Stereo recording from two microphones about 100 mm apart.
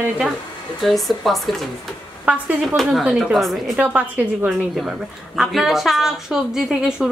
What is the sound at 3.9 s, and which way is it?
Speech, 15° right (ahead or behind).